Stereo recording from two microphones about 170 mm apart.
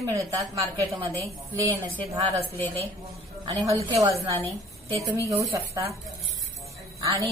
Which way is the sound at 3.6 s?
20° right (ahead or behind).